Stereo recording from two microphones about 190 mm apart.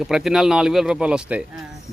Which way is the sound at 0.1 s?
5° right (ahead or behind).